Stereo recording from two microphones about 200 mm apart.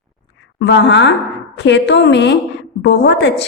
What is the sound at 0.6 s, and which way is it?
A woman's voice, 60° left (ahead or behind).